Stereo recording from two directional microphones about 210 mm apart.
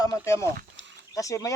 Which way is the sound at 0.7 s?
15° left (ahead or behind).